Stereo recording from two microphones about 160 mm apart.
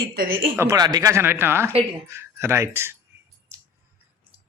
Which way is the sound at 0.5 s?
15° right (ahead or behind).